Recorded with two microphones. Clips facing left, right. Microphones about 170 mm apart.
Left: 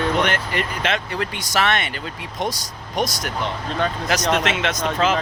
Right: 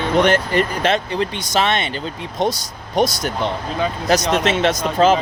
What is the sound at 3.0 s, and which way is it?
Speech, 30° right (ahead or behind).